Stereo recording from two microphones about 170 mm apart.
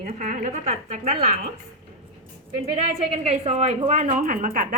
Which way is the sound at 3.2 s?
40° right (ahead or behind).